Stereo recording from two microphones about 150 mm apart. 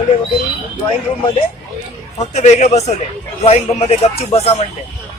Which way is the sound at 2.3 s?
50° left (ahead or behind).